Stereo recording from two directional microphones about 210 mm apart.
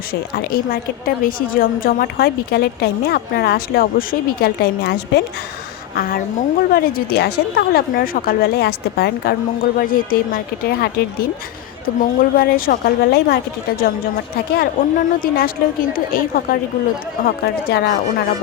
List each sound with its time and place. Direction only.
0.1 s a woman's voice: 45° left (ahead or behind)
11.9 s a woman's voice: 45° left (ahead or behind)